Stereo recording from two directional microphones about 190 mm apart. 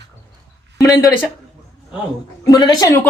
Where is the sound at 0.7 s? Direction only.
20° left (ahead or behind).